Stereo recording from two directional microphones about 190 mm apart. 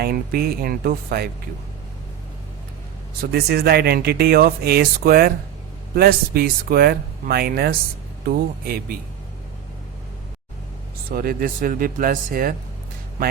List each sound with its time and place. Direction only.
0.0 s speech: 55° right (ahead or behind)
3.2 s speech: 55° right (ahead or behind)
11.1 s speech: 50° right (ahead or behind)